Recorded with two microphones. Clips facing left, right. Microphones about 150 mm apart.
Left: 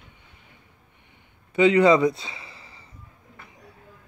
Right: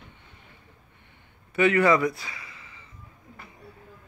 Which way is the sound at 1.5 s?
20° left (ahead or behind).